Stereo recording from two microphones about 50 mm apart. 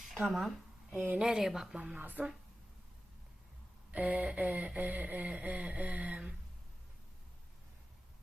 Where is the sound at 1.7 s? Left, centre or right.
Right.